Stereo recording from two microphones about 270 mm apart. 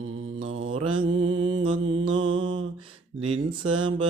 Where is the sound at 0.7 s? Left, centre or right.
Centre.